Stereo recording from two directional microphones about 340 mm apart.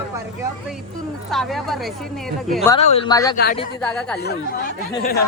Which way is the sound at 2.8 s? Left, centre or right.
Centre.